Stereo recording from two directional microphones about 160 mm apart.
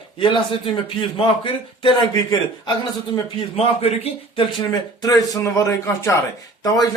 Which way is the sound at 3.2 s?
35° left (ahead or behind).